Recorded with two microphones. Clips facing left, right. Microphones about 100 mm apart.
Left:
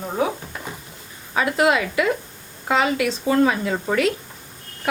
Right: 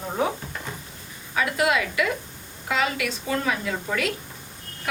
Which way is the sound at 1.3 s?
30° left (ahead or behind).